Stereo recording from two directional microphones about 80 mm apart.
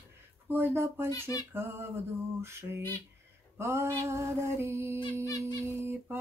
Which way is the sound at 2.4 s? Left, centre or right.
Right.